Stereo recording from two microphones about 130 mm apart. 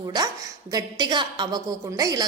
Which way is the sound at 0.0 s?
30° right (ahead or behind).